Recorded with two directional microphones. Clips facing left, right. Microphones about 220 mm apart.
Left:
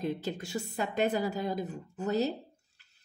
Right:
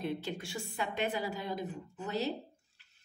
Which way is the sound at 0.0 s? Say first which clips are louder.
Left 3 dB; 40° left (ahead or behind).